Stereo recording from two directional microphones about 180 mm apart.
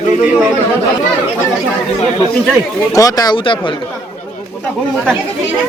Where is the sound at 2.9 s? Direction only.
20° left (ahead or behind).